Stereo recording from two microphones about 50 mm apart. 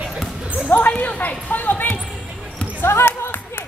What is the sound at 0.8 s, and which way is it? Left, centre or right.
Speech, left.